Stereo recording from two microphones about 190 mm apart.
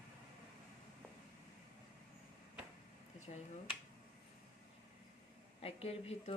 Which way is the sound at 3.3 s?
40° left (ahead or behind).